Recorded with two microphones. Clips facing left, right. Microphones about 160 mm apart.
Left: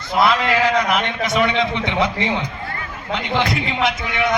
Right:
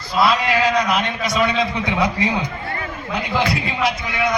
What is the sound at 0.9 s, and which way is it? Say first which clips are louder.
A man's voice: left 1 dB; 20° left (ahead or behind).